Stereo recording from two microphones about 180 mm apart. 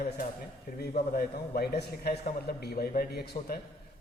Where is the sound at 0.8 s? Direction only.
55° left (ahead or behind).